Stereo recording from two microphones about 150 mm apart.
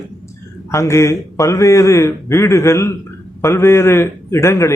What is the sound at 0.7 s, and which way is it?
A man's voice, 20° left (ahead or behind).